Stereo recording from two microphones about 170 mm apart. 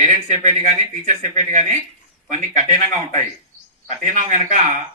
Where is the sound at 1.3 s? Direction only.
45° right (ahead or behind).